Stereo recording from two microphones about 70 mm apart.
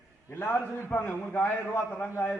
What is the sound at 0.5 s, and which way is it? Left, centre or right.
Speech, left.